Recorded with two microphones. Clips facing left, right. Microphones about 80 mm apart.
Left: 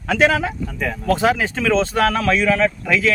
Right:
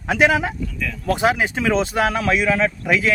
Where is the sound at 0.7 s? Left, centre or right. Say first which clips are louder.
Left 4 dB; left.